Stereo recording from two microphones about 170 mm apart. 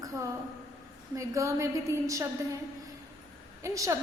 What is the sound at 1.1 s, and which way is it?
A woman's voice, 20° right (ahead or behind).